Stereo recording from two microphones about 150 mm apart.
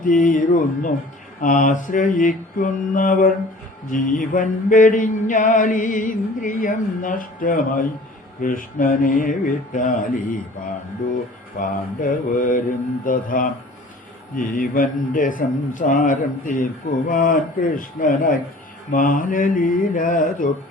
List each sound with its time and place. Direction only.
0.0 s mantra: 65° left (ahead or behind)
11.6 s speech: 70° left (ahead or behind)
14.3 s mantra: 65° left (ahead or behind)
17.1 s speech: 65° left (ahead or behind)
18.9 s mantra: 65° left (ahead or behind)